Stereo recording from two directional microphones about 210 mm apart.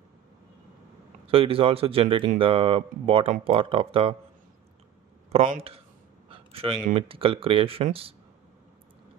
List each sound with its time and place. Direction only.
1.2 s speech: 25° right (ahead or behind)
5.3 s speech: 35° right (ahead or behind)